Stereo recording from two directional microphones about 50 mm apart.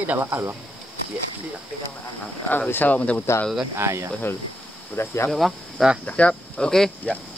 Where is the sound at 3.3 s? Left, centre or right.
Left.